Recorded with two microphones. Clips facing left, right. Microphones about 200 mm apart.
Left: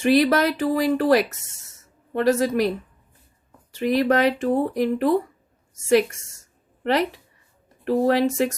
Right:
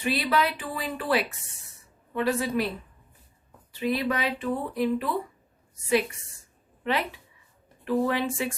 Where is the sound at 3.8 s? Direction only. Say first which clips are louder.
Left 8 dB; 45° left (ahead or behind).